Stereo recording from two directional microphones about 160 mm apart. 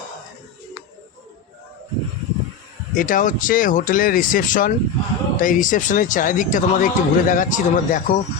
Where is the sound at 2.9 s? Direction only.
55° left (ahead or behind).